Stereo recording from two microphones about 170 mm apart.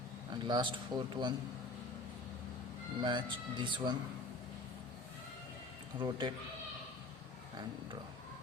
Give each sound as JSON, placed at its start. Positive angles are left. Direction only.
{"t": 0.4, "sound": "speech", "side_deg": -25}
{"t": 3.0, "sound": "speech", "side_deg": -25}
{"t": 6.0, "sound": "speech", "side_deg": -25}